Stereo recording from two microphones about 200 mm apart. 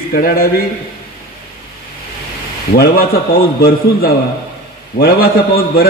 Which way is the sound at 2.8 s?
50° left (ahead or behind).